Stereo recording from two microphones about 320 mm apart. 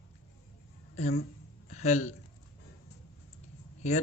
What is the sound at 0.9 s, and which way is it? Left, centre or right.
A woman's voice, centre.